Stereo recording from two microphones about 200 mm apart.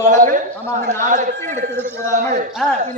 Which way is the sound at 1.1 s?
35° right (ahead or behind).